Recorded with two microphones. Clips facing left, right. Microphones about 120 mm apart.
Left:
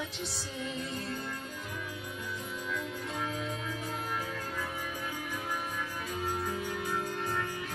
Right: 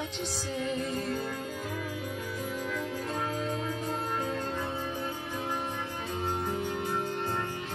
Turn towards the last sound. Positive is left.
turn(degrees=-25)  # may be behind; listen again after turning